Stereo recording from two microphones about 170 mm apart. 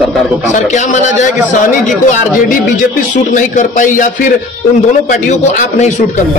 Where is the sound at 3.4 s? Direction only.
50° left (ahead or behind).